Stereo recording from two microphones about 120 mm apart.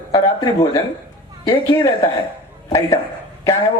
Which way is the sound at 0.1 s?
30° left (ahead or behind).